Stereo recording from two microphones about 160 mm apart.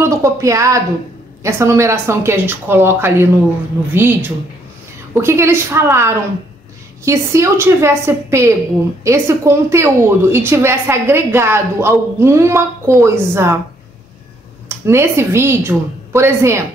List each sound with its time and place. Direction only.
0.0 s a woman's voice: 20° right (ahead or behind)
14.9 s a woman's voice: 15° right (ahead or behind)